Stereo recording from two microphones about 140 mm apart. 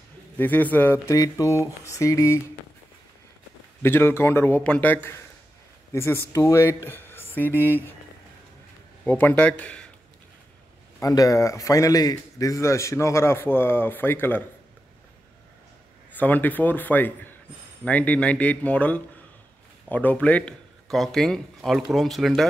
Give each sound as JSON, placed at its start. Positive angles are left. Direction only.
{"t": 0.4, "sound": "speech", "side_deg": 10}
{"t": 1.0, "sound": "a man's voice", "side_deg": 25}
{"t": 3.8, "sound": "speech", "side_deg": 15}
{"t": 9.0, "sound": "a man's voice", "side_deg": 10}
{"t": 11.0, "sound": "a man's voice", "side_deg": 25}
{"t": 16.2, "sound": "speech", "side_deg": 10}